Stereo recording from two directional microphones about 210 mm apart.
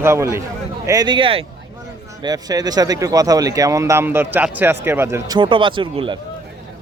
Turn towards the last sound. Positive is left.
turn(degrees=-25)  # may be behind; listen again after turning